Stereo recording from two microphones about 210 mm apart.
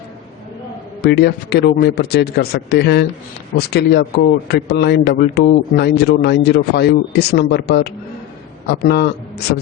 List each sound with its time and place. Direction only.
1.0 s a man's voice: 50° left (ahead or behind)